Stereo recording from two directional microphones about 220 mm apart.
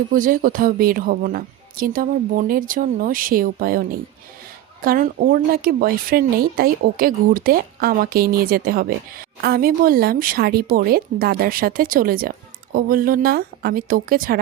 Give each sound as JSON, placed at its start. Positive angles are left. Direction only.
{"t": 0.1, "sound": "speech", "side_deg": -40}